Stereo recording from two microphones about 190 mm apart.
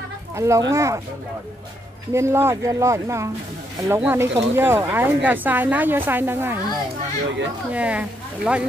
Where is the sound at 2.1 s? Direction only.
15° right (ahead or behind).